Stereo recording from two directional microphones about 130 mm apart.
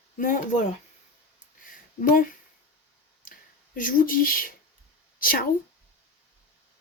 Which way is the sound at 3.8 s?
90° left.